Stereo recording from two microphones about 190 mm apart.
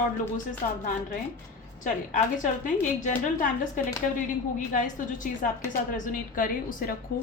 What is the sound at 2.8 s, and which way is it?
A woman's voice, 45° left (ahead or behind).